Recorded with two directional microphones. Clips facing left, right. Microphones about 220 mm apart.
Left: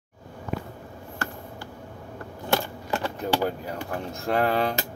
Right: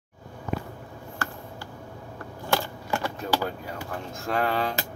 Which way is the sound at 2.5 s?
20° left (ahead or behind).